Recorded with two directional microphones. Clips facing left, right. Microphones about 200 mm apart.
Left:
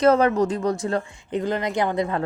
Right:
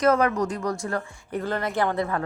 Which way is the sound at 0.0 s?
30° left (ahead or behind).